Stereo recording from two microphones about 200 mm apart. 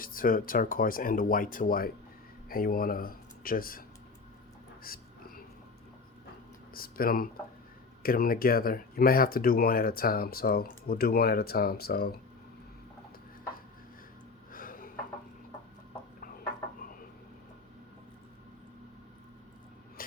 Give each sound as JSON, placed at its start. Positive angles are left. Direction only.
{"t": 0.0, "sound": "speech", "side_deg": 45}
{"t": 4.8, "sound": "whispering", "side_deg": 45}
{"t": 6.7, "sound": "speech", "side_deg": 45}
{"t": 14.5, "sound": "a sound", "side_deg": 45}
{"t": 20.0, "sound": "vehicle", "side_deg": 45}